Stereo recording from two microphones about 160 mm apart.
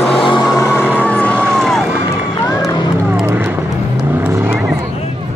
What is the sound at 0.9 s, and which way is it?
Vehicle, 10° left (ahead or behind).